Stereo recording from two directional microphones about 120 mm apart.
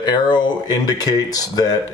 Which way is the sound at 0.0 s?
40° left (ahead or behind).